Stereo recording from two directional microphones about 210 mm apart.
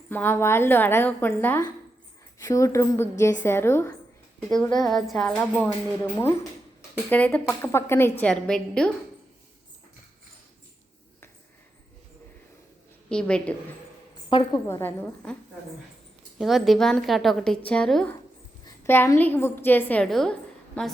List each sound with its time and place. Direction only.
0.1 s a woman's voice: 10° left (ahead or behind)
6.9 s a woman's voice: 5° left (ahead or behind)
13.1 s a woman's voice: 5° left (ahead or behind)
14.3 s a woman's voice: 20° left (ahead or behind)
14.7 s a woman's voice: 10° left (ahead or behind)
16.4 s a woman's voice: centre (ahead or behind)